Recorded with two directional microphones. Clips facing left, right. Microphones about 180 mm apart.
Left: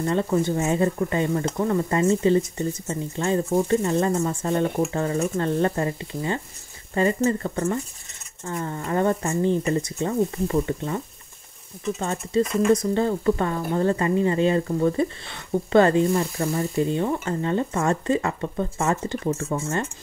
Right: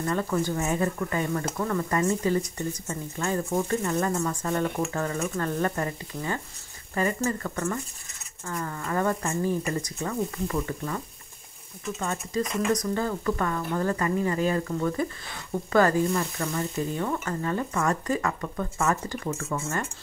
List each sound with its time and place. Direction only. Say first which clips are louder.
0.0 s speech: left 4 dB; 25° left (ahead or behind)
12.0 s speech: left 5 dB; 30° left (ahead or behind)